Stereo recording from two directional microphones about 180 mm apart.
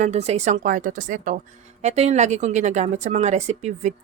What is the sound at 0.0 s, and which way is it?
A woman's voice, 35° right (ahead or behind).